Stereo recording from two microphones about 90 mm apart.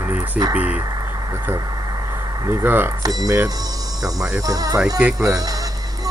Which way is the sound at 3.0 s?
45° right (ahead or behind).